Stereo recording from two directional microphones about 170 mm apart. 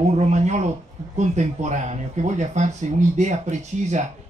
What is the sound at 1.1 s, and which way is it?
Speech, 45° right (ahead or behind).